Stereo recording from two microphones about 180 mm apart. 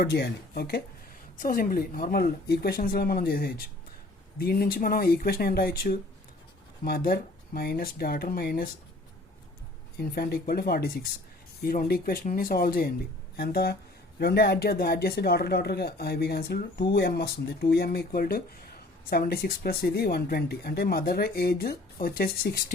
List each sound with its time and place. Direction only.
0.0 s speech: 65° left (ahead or behind)
10.0 s speech: 55° left (ahead or behind)